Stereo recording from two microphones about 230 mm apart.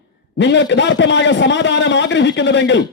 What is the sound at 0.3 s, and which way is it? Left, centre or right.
A man's voice, left.